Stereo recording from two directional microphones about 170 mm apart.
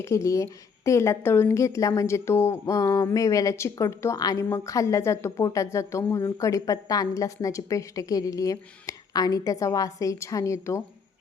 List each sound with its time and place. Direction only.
0.0 s a woman's voice: 15° left (ahead or behind)